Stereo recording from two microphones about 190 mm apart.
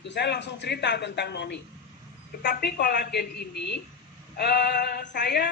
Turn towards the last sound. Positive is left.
turn(degrees=55)  # may be behind; listen again after turning